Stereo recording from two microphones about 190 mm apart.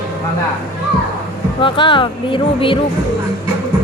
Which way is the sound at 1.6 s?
25° left (ahead or behind).